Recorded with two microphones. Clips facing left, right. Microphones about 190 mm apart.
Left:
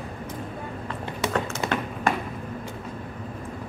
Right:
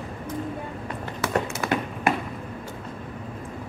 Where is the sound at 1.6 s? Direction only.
25° left (ahead or behind).